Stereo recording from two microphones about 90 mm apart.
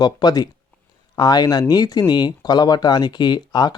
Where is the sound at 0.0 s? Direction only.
50° left (ahead or behind).